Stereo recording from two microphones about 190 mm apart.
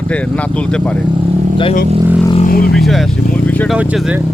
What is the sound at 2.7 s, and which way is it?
Vehicle, centre (ahead or behind).